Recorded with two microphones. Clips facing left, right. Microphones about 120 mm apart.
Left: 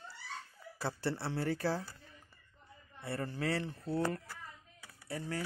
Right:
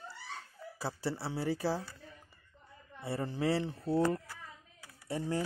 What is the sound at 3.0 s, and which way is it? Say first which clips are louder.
A man's voice: right 3 dB; 20° right (ahead or behind).